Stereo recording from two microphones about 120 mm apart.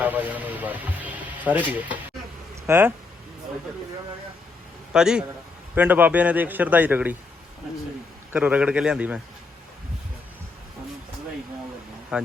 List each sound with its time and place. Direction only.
0.0 s a sound: 15° right (ahead or behind)
2.6 s speech: 20° right (ahead or behind)
4.9 s a man's voice: 5° right (ahead or behind)
8.3 s a man's voice: 10° right (ahead or behind)
12.1 s speech: 5° right (ahead or behind)